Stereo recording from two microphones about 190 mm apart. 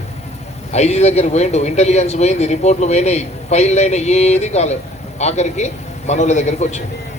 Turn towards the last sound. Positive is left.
turn(degrees=35)  # may be behind; listen again after turning